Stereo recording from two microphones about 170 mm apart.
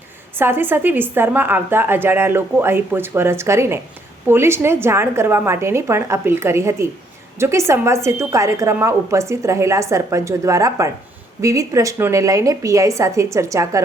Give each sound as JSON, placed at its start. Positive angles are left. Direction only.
{"t": 0.3, "sound": "a woman's voice", "side_deg": -15}